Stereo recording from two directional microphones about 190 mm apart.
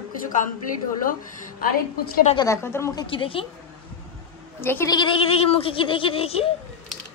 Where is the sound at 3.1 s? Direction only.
30° left (ahead or behind).